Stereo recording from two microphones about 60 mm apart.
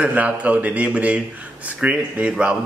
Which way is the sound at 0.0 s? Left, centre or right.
Right.